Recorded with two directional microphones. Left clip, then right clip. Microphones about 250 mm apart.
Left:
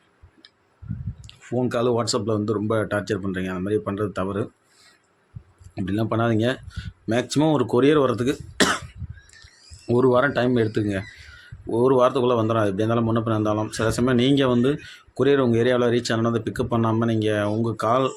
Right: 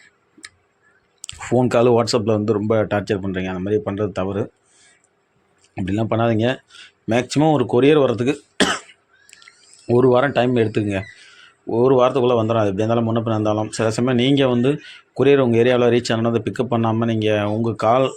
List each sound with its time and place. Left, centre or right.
1.2 s a sound: right
1.5 s speech: centre
5.7 s speech: centre
9.8 s speech: centre